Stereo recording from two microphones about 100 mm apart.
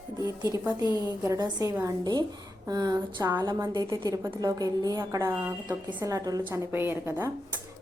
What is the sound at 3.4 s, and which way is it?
A woman's voice, 45° right (ahead or behind).